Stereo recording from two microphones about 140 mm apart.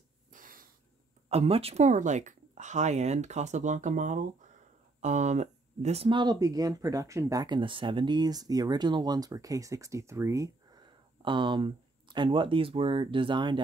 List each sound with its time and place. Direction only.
0.3 s snort: 75° right (ahead or behind)
1.3 s speech: 45° right (ahead or behind)
6.0 s speech: 30° right (ahead or behind)
11.2 s speech: 35° right (ahead or behind)